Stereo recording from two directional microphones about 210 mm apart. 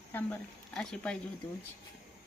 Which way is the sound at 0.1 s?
10° left (ahead or behind).